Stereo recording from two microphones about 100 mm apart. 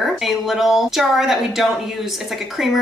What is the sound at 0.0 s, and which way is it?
Speech, centre (ahead or behind).